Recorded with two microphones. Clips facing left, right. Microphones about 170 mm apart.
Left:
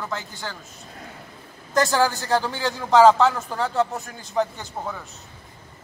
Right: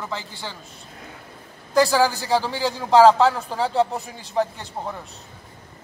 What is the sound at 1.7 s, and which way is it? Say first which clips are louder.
A man's voice: right 2 dB; centre (ahead or behind).